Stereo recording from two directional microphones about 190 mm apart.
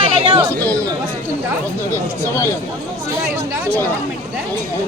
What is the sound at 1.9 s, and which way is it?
Speech, 15° left (ahead or behind).